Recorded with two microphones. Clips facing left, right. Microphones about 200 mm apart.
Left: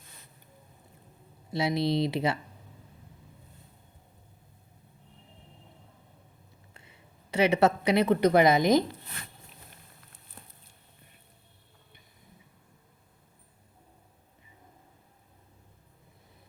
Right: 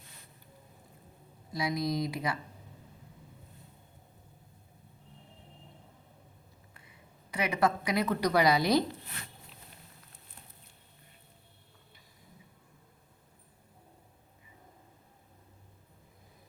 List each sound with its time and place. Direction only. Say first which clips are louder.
1.5 s a woman's voice: left 5 dB; 25° left (ahead or behind)
6.7 s a sound: left 2 dB; 25° left (ahead or behind)
7.6 s a woman's voice: left 5 dB; 25° left (ahead or behind)